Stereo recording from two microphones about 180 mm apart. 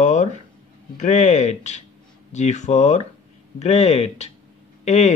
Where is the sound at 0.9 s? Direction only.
40° left (ahead or behind).